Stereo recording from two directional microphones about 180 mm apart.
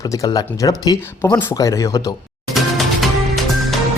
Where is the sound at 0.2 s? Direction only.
20° left (ahead or behind).